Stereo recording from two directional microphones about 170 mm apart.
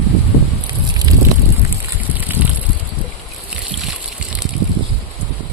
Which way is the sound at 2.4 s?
10° right (ahead or behind).